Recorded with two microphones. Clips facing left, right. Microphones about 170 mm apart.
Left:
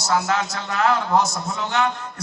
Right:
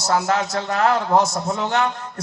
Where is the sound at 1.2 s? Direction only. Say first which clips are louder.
Right 3 dB; 55° right (ahead or behind).